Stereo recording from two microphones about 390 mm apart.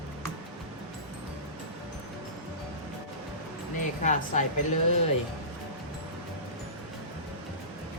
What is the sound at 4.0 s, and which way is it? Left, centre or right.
Speech, centre.